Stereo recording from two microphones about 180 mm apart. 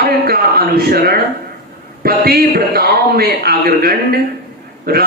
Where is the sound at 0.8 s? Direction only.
60° right (ahead or behind).